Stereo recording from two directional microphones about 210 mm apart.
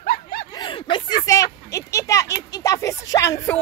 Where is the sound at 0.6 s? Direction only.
20° left (ahead or behind).